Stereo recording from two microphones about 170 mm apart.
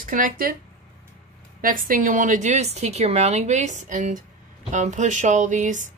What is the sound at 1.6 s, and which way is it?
Speech, 55° right (ahead or behind).